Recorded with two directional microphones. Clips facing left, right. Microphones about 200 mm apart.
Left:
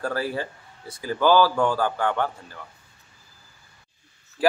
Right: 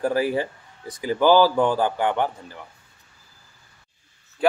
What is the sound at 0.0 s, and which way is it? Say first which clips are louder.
Speech: right 5 dB; 15° right (ahead or behind).